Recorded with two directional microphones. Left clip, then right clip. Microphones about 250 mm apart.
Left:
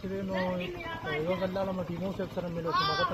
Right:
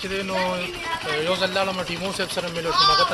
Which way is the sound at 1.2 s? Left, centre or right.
Right.